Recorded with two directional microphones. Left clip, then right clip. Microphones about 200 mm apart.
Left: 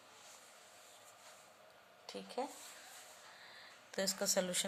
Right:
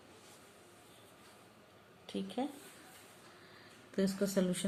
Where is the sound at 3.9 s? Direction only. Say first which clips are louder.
Right 2 dB; 45° left (ahead or behind).